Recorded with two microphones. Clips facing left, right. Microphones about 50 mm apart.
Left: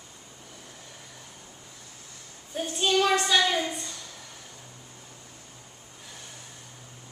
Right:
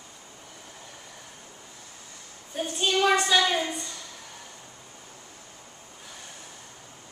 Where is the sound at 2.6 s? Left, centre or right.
Centre.